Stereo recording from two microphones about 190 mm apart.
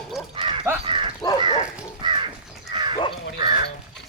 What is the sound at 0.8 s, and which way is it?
Crow, 25° right (ahead or behind).